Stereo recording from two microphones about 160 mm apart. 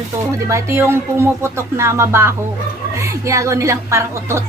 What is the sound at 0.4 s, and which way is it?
Speech, 15° right (ahead or behind).